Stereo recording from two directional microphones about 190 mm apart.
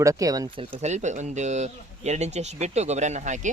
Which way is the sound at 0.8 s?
35° right (ahead or behind).